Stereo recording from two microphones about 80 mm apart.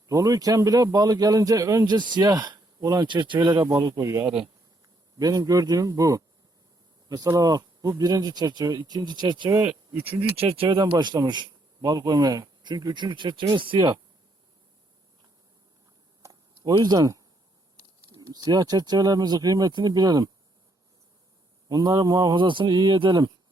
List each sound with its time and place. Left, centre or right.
0.1 s a man's voice: right
2.0 s speech: right
4.2 s speech: right
5.2 s a man's voice: right
7.3 s speech: right
9.5 s speech: right
10.7 s speech: right
16.2 s a sound: right
18.3 s speech: right
21.7 s a man's voice: right
22.4 s speech: right
22.8 s speech: right